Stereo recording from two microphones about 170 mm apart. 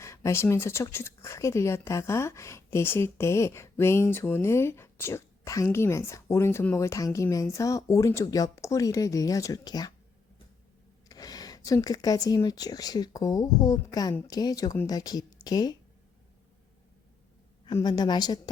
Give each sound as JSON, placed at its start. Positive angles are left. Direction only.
{"t": 0.0, "sound": "speech", "side_deg": 15}
{"t": 11.1, "sound": "speech", "side_deg": 20}
{"t": 17.7, "sound": "speech", "side_deg": 25}